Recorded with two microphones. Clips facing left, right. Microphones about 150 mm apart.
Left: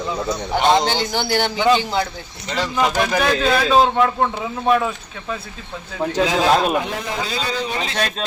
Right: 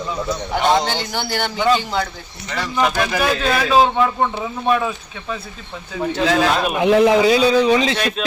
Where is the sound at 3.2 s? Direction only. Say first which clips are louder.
Left 2 dB; 5° right (ahead or behind).